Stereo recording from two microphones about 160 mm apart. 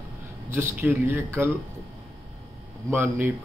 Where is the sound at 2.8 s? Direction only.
15° right (ahead or behind).